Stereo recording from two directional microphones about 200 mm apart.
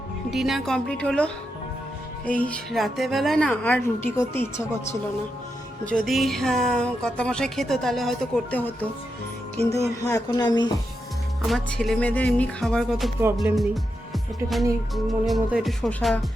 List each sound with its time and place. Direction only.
0.3 s a woman's voice: centre (ahead or behind)
5.8 s a woman's voice: centre (ahead or behind)
10.0 s speech: 15° left (ahead or behind)
11.4 s a woman's voice: centre (ahead or behind)
14.9 s a woman's voice: centre (ahead or behind)